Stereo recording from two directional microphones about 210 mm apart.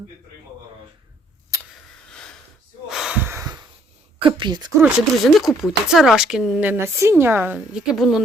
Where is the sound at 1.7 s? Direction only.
5° left (ahead or behind).